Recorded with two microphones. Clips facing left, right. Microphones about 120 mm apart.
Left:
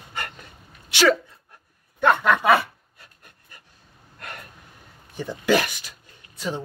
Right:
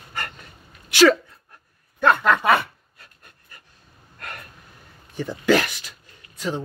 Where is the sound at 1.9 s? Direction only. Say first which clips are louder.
Right 1 dB; 20° left (ahead or behind).